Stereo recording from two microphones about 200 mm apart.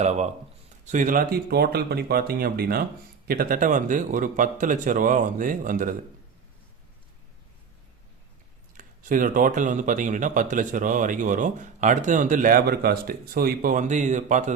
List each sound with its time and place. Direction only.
0.0 s speech: 35° right (ahead or behind)
8.8 s speech: 40° right (ahead or behind)